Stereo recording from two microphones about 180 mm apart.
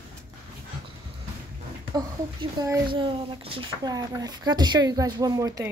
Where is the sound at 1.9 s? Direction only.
20° right (ahead or behind).